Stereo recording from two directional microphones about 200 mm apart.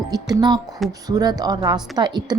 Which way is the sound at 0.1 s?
20° right (ahead or behind).